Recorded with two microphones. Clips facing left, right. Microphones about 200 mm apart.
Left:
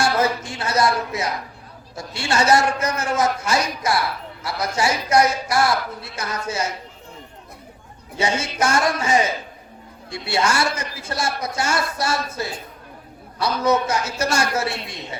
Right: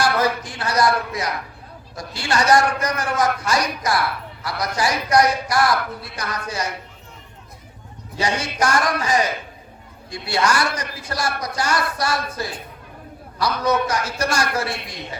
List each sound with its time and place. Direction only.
0.0 s speech: 25° left (ahead or behind)
8.2 s speech: 25° left (ahead or behind)
13.6 s speech: 25° left (ahead or behind)